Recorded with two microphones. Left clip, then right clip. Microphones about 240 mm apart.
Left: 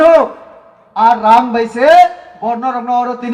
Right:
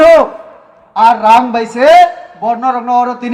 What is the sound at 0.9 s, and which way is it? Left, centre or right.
A man's voice, right.